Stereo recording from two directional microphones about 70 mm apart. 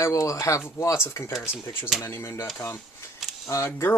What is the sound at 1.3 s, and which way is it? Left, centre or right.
Speech, centre.